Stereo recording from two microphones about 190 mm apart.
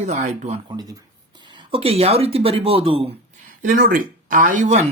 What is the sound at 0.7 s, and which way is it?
Speech, 20° right (ahead or behind).